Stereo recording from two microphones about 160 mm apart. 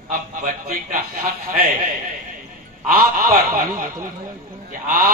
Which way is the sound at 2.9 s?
60° right (ahead or behind).